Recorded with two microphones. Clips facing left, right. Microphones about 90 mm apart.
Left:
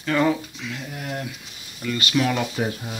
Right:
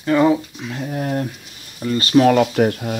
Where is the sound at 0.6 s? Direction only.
40° right (ahead or behind).